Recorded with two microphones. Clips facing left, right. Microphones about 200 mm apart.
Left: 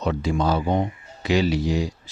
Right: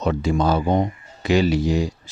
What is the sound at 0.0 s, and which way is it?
Speech, 50° right (ahead or behind).